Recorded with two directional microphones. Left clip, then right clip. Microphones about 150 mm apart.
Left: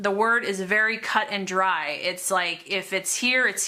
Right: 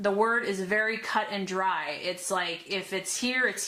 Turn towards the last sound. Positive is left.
turn(degrees=25)  # may be behind; listen again after turning